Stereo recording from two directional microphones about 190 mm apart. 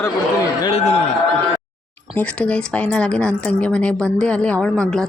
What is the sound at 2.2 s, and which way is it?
A woman's voice, 5° left (ahead or behind).